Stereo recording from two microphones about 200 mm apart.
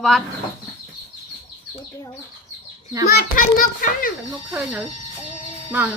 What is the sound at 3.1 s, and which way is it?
A child's voice, 45° left (ahead or behind).